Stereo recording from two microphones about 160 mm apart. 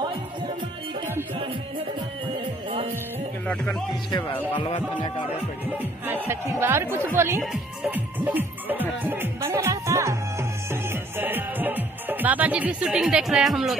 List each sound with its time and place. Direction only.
0.0 s music: 30° right (ahead or behind)
3.4 s speech: 5° left (ahead or behind)
4.6 s speech: 30° left (ahead or behind)
5.7 s music: 10° right (ahead or behind)